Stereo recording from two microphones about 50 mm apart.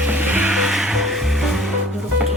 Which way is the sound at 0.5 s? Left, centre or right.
Centre.